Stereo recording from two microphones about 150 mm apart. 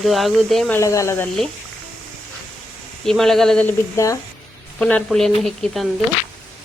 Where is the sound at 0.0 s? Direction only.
Centre (ahead or behind).